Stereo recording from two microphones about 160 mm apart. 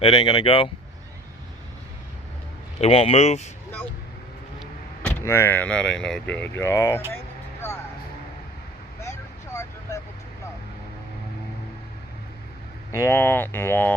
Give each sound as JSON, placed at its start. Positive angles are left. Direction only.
{"t": 0.0, "sound": "speech", "side_deg": 30}
{"t": 2.8, "sound": "speech", "side_deg": 40}
{"t": 5.0, "sound": "speech", "side_deg": 15}
{"t": 9.0, "sound": "vehicle", "side_deg": 15}
{"t": 12.9, "sound": "speech", "side_deg": 15}